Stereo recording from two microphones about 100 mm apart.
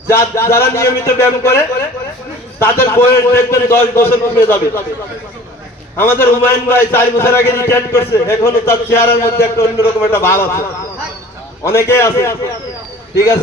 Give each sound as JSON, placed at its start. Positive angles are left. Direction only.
{"t": 0.1, "sound": "a man's voice", "side_deg": 25}
{"t": 6.0, "sound": "a man's voice", "side_deg": 25}
{"t": 11.6, "sound": "a man's voice", "side_deg": 25}